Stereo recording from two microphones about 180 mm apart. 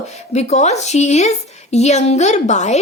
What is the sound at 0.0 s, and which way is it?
Speech, 40° left (ahead or behind).